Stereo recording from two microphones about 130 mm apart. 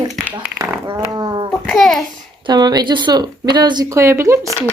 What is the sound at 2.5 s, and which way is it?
Speech, 30° right (ahead or behind).